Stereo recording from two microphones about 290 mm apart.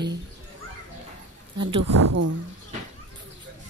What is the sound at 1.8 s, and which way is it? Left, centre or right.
Speech, right.